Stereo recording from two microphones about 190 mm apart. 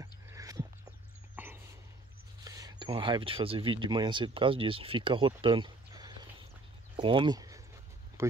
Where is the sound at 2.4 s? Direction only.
20° right (ahead or behind).